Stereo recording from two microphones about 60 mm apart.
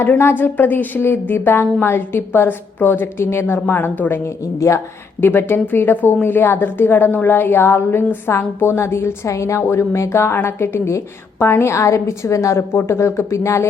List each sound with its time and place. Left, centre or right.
0.2 s a woman's voice: left
5.2 s a woman's voice: left